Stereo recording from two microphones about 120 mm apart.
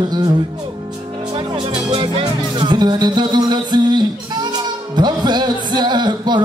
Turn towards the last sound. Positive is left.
turn(degrees=-40)  # may be behind; listen again after turning